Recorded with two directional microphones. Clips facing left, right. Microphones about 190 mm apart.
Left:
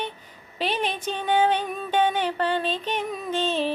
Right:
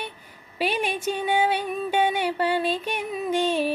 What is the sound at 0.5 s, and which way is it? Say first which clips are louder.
Speech: right 1 dB; 10° right (ahead or behind).